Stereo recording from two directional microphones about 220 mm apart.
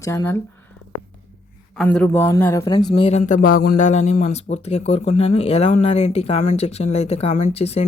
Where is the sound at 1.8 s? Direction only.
5° left (ahead or behind).